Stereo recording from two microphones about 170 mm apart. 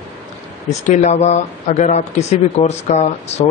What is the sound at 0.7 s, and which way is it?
Speech, 45° left (ahead or behind).